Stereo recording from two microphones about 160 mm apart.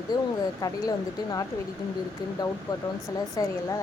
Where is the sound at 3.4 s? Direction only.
25° left (ahead or behind).